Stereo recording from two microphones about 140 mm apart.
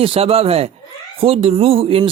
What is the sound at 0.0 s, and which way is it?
A man's voice, 40° right (ahead or behind).